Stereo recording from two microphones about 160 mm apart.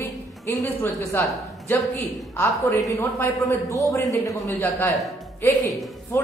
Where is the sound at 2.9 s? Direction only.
20° left (ahead or behind).